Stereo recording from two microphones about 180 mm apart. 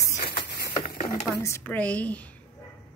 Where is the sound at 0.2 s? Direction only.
55° left (ahead or behind).